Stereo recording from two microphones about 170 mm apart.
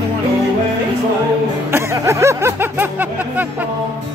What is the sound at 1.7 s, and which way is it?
Music, 15° right (ahead or behind).